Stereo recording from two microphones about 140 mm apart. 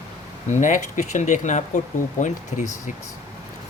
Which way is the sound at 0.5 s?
60° left (ahead or behind).